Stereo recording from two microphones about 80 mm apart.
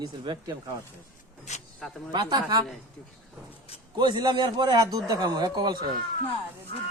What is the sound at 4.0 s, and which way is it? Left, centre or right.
A man's voice, right.